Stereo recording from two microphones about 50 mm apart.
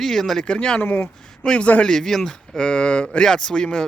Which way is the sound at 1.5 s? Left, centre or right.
Left.